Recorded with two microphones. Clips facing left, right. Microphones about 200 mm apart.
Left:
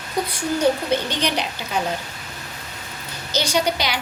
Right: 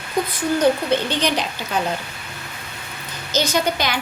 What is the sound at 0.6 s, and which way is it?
Speech, 10° left (ahead or behind).